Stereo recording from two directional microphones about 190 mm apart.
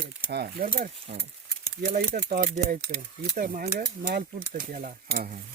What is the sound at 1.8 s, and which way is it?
Speech, 45° right (ahead or behind).